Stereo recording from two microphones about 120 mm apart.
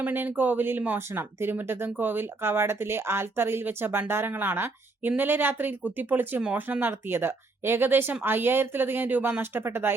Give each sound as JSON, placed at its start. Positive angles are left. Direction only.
{"t": 0.0, "sound": "speech", "side_deg": -15}